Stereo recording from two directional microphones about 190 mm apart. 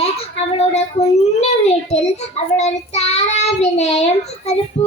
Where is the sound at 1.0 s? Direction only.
35° left (ahead or behind).